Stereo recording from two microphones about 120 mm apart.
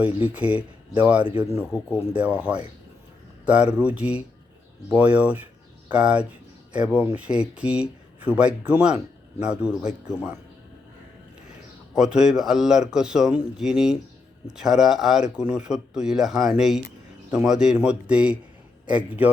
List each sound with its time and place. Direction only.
0.0 s speech: 15° right (ahead or behind)
11.9 s speech: 5° right (ahead or behind)